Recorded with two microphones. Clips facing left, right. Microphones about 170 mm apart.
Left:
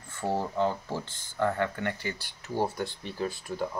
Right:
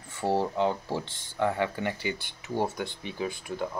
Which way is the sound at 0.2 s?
30° right (ahead or behind).